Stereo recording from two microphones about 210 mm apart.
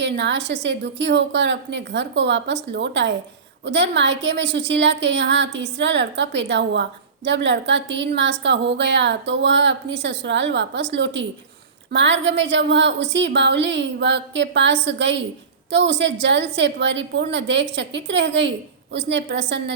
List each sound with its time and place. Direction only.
0.0 s a woman's voice: 55° right (ahead or behind)